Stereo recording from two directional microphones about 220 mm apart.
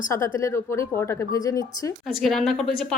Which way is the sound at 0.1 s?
15° left (ahead or behind).